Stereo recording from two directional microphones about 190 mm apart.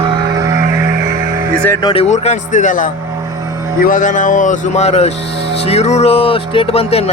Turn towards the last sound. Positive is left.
turn(degrees=30)  # may be behind; listen again after turning